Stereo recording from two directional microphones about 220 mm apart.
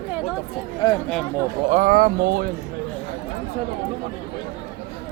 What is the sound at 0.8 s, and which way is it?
Speech, 15° left (ahead or behind).